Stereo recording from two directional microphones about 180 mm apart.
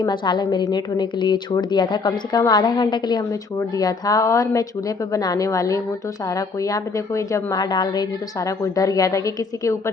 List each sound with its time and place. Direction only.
0.0 s a woman's voice: 25° left (ahead or behind)